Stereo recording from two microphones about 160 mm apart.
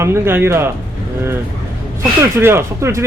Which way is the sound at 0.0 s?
15° right (ahead or behind).